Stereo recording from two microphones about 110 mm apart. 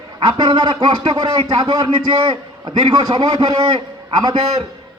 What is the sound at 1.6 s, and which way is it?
A man's voice, 35° right (ahead or behind).